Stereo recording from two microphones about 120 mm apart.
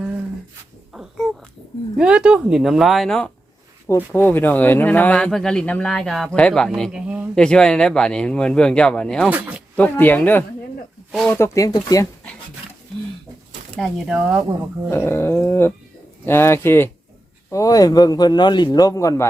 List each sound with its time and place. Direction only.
0.9 s babbling: centre (ahead or behind)
2.0 s speech: 10° right (ahead or behind)
3.8 s speech: 15° left (ahead or behind)
6.9 s speech: 10° right (ahead or behind)
7.3 s speech: 5° left (ahead or behind)
9.3 s speech: 10° right (ahead or behind)
9.7 s speech: 15° left (ahead or behind)
11.3 s dog: 20° left (ahead or behind)
13.7 s speech: 5° left (ahead or behind)
14.1 s speech: 10° right (ahead or behind)
14.8 s dog: 20° left (ahead or behind)
17.5 s a man's voice: 30° left (ahead or behind)